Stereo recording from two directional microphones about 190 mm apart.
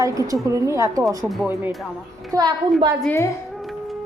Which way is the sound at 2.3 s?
20° right (ahead or behind).